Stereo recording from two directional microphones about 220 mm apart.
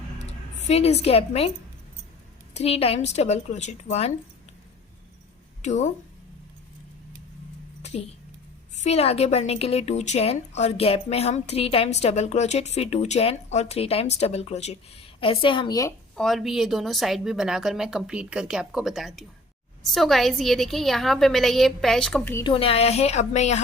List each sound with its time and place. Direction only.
0.2 s a sound: 30° left (ahead or behind)
1.0 s a woman's voice: 25° left (ahead or behind)
5.6 s a woman's voice: 30° left (ahead or behind)
7.8 s a sound: 30° left (ahead or behind)
8.7 s a woman's voice: 30° left (ahead or behind)
16.1 s speech: centre (ahead or behind)
22.5 s a woman's voice: 25° left (ahead or behind)